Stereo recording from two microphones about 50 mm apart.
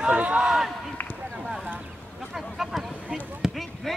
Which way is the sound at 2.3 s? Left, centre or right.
Centre.